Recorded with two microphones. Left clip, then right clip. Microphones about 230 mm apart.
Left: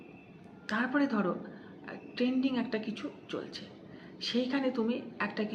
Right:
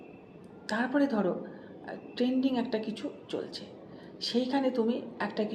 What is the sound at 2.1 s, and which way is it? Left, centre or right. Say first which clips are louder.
A woman's voice: right 2 dB; left.